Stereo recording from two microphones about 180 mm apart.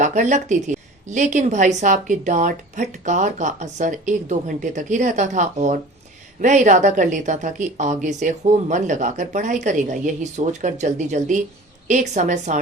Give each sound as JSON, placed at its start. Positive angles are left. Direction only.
{"t": 0.0, "sound": "a woman's voice", "side_deg": -40}